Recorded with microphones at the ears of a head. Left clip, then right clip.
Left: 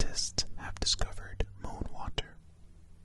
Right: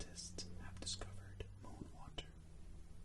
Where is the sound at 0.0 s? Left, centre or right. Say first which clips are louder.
Left 17 dB; left.